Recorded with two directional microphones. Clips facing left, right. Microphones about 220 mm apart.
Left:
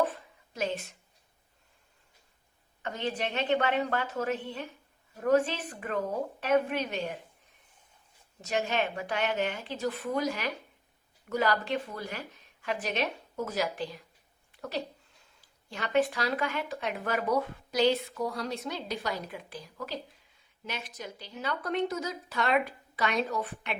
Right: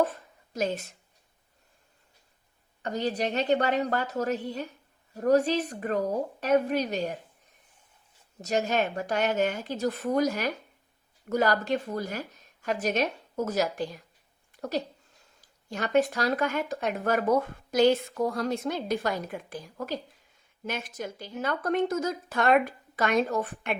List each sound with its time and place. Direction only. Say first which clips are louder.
0.5 s a woman's voice: right 3 dB; 40° right (ahead or behind)
2.8 s a woman's voice: right 4 dB; 40° right (ahead or behind)
8.4 s speech: right 3 dB; 40° right (ahead or behind)